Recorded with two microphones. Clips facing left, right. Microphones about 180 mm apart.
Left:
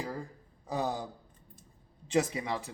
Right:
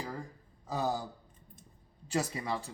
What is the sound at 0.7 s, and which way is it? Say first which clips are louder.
Speech: even; 20° left (ahead or behind).